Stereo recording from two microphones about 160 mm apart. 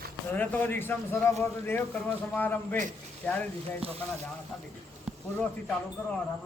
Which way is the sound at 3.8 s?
35° right (ahead or behind).